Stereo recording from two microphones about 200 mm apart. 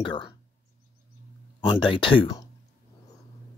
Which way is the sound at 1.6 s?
25° left (ahead or behind).